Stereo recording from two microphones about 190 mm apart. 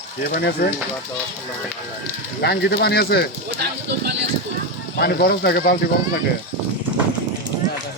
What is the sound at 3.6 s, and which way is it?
Speech, 60° right (ahead or behind).